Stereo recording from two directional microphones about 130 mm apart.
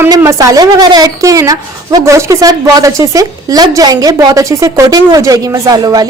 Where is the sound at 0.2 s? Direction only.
25° right (ahead or behind).